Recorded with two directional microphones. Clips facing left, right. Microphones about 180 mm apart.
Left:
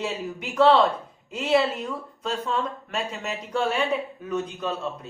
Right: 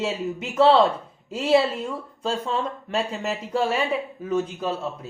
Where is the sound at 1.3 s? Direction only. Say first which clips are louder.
Right 2 dB; 30° right (ahead or behind).